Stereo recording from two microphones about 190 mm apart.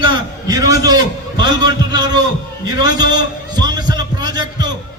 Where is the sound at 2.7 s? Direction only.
20° right (ahead or behind).